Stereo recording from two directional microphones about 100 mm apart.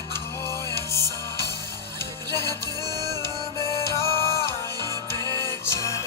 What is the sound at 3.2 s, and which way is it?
Music, 30° left (ahead or behind).